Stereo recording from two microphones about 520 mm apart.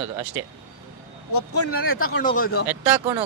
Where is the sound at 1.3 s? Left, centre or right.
Left.